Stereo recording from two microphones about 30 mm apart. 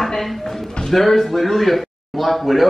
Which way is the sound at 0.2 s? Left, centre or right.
Centre.